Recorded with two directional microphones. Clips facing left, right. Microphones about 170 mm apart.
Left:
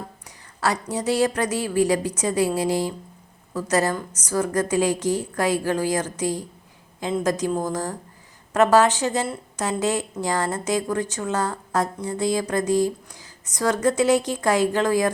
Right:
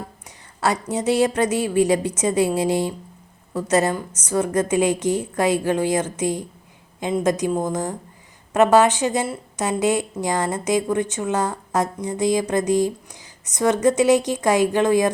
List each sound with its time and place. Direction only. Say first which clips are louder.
0.3 s a woman's voice: right 2 dB; 25° right (ahead or behind)